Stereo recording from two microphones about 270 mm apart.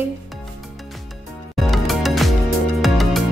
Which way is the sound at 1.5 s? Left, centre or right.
Centre.